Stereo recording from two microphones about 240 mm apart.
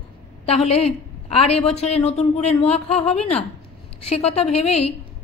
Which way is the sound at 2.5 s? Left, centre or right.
Centre.